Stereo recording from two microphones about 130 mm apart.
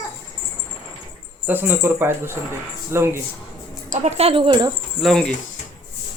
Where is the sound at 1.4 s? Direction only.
15° right (ahead or behind).